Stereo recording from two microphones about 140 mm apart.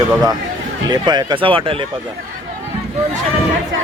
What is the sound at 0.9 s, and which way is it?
Speech, 30° right (ahead or behind).